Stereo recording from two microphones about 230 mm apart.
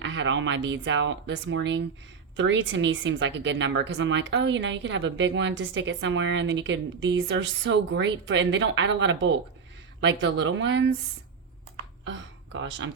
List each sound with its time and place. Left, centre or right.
0.0 s speech: right
12.0 s speech: right